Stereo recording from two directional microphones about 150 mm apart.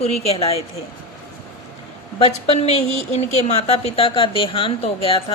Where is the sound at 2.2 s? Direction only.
40° left (ahead or behind).